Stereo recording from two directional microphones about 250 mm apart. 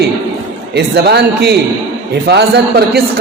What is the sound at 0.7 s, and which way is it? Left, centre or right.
A man's voice, right.